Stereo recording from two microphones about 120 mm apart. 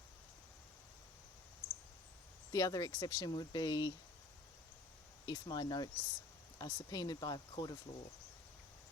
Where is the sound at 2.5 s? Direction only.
30° left (ahead or behind).